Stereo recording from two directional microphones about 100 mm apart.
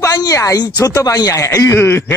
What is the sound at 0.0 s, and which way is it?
Speech, 35° left (ahead or behind).